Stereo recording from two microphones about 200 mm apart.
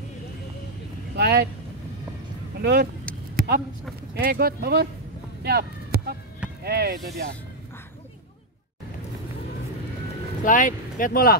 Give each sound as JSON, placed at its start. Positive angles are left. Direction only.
{"t": 1.1, "sound": "speech", "side_deg": -55}
{"t": 2.6, "sound": "speech", "side_deg": -55}
{"t": 3.3, "sound": "a sound", "side_deg": -45}
{"t": 4.1, "sound": "speech", "side_deg": -50}
{"t": 5.4, "sound": "a sound", "side_deg": -55}
{"t": 6.6, "sound": "speech", "side_deg": -55}
{"t": 10.4, "sound": "speech", "side_deg": 40}